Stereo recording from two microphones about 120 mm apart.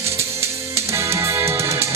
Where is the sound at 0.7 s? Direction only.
20° right (ahead or behind).